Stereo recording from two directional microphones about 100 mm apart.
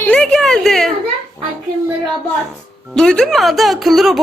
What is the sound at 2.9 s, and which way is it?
Speech, 5° left (ahead or behind).